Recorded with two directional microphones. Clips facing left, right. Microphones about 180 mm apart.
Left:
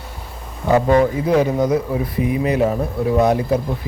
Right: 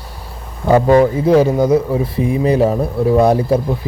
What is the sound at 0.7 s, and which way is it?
A man's voice, 30° right (ahead or behind).